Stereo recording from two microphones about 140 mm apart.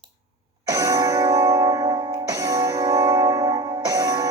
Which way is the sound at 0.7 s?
25° right (ahead or behind).